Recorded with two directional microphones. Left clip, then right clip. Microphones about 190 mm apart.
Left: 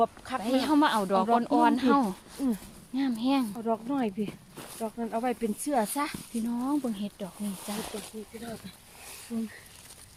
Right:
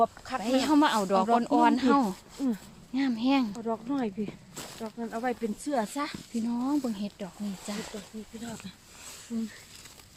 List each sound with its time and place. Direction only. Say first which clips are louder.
0.0 s speech: right 1 dB; centre (ahead or behind)
2.4 s speech: left 1 dB; 20° left (ahead or behind)
2.9 s speech: right 1 dB; 5° right (ahead or behind)
3.6 s speech: left 2 dB; 50° left (ahead or behind)
6.5 s speech: even; centre (ahead or behind)